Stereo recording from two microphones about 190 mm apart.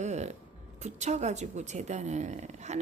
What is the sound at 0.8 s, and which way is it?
A woman's voice, 35° right (ahead or behind).